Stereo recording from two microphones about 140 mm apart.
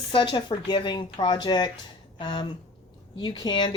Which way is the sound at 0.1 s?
35° left (ahead or behind).